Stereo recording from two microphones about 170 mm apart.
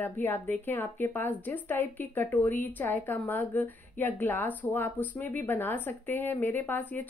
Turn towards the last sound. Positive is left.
turn(degrees=10)  # may be behind; listen again after turning